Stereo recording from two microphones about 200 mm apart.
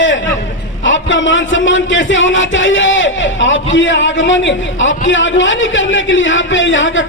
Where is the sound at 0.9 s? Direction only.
70° left (ahead or behind).